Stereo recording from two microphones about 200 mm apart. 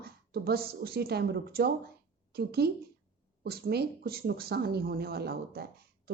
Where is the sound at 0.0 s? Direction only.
50° right (ahead or behind).